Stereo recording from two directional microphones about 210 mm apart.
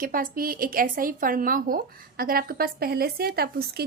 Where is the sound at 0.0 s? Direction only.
40° right (ahead or behind).